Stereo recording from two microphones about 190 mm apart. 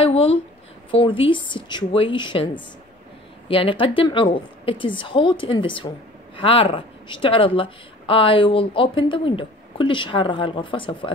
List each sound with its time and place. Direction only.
0.0 s speech: 30° left (ahead or behind)